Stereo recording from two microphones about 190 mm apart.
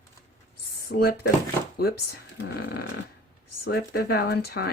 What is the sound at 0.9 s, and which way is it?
Speech, 55° left (ahead or behind).